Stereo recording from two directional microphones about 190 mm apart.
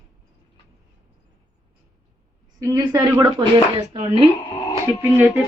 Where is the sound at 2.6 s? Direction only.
15° right (ahead or behind).